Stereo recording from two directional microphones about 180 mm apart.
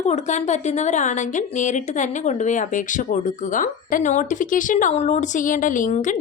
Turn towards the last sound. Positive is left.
turn(degrees=45)  # may be behind; listen again after turning